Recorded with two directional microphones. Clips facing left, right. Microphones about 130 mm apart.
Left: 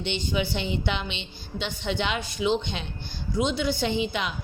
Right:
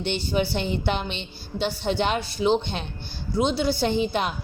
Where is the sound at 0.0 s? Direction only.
45° right (ahead or behind).